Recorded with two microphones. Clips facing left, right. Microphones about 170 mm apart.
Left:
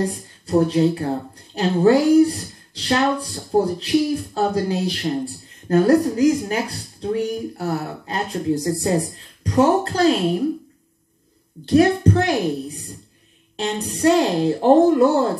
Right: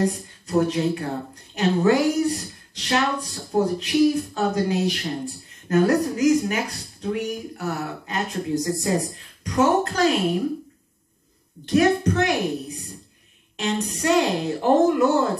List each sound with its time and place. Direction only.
0.0 s speech: 30° left (ahead or behind)
11.6 s speech: 30° left (ahead or behind)